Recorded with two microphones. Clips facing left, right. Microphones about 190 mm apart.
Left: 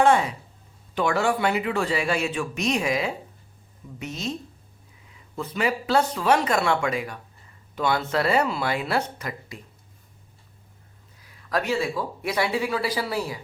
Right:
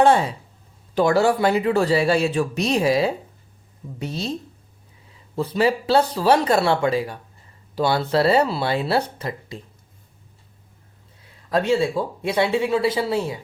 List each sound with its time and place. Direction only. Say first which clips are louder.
0.0 s speech: right 3 dB; 30° right (ahead or behind)
5.4 s speech: right 6 dB; 30° right (ahead or behind)
11.2 s speech: right 5 dB; 25° right (ahead or behind)